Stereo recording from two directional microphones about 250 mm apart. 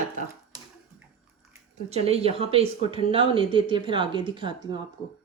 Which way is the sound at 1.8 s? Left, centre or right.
Right.